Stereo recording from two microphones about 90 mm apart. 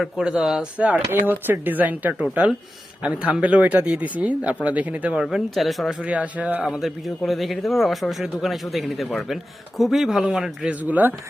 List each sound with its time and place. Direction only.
0.0 s speech: 5° right (ahead or behind)
5.2 s speech: centre (ahead or behind); by 11.1 s 20° right (ahead or behind)